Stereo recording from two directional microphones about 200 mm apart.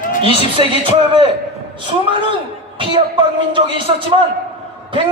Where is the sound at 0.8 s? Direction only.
25° right (ahead or behind).